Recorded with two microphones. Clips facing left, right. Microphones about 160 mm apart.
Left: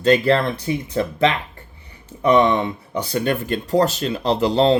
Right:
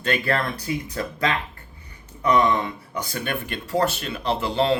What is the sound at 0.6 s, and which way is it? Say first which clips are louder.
Speech: left 6 dB; 25° left (ahead or behind).